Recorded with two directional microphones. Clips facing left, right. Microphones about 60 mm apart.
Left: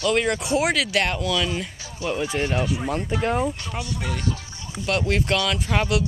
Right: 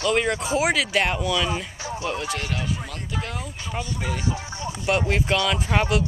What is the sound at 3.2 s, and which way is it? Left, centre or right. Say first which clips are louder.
Speech: left 11 dB; left.